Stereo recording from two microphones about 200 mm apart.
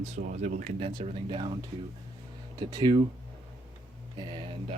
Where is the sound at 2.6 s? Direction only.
20° right (ahead or behind).